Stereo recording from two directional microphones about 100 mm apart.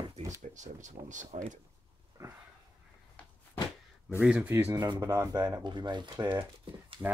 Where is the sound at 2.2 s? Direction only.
35° right (ahead or behind).